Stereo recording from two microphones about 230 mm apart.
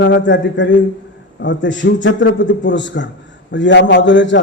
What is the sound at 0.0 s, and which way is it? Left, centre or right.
A man's voice, left.